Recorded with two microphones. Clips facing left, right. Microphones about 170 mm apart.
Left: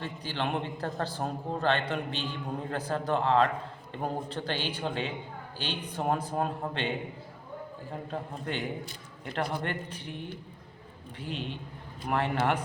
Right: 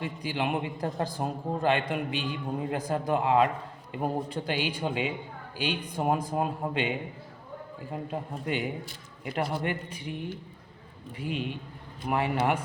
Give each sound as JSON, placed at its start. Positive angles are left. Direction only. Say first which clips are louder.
{"t": 0.0, "sound": "a man's voice", "louder": "right 3 dB", "side_deg": -10}
{"t": 8.1, "sound": "a man's voice", "louder": "right 3 dB", "side_deg": -10}
{"t": 11.2, "sound": "a man's voice", "louder": "right 4 dB", "side_deg": -10}